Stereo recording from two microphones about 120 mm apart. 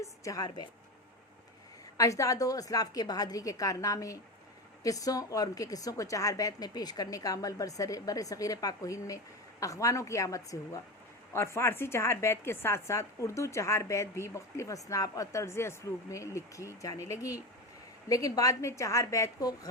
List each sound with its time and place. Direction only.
0.0 s speech: 30° left (ahead or behind)
2.0 s a woman's voice: 25° left (ahead or behind)